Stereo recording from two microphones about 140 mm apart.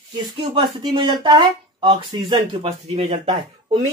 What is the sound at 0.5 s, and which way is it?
Speech, 35° right (ahead or behind).